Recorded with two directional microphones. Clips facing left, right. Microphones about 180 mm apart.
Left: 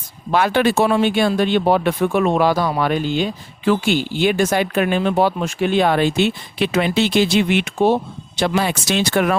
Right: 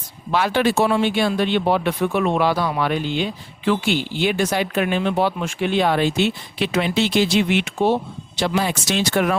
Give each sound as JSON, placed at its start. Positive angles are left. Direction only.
{"t": 0.3, "sound": "speech", "side_deg": 50}
{"t": 8.4, "sound": "speech", "side_deg": 60}